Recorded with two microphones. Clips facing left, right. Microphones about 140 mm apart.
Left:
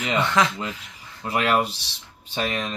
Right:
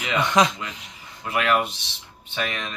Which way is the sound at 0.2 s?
15° right (ahead or behind).